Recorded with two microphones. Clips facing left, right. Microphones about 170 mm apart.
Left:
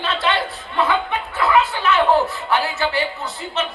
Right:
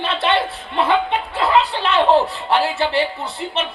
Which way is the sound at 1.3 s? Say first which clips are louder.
Even; 30° right (ahead or behind).